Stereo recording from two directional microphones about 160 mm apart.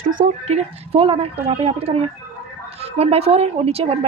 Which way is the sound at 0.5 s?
40° right (ahead or behind).